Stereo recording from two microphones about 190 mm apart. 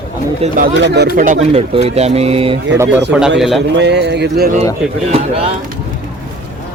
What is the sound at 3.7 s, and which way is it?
Speech, 65° right (ahead or behind).